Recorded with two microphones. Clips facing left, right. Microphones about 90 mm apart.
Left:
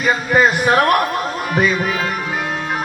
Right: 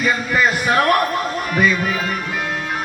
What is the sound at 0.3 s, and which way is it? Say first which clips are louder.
Speech: left 4 dB; 25° left (ahead or behind).